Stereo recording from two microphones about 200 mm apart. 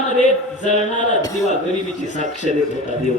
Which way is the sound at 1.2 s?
15° left (ahead or behind).